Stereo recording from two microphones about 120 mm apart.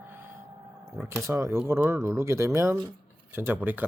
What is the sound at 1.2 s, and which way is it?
Speech, 25° right (ahead or behind).